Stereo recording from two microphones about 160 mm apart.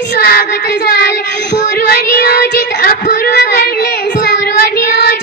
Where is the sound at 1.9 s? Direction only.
70° left (ahead or behind).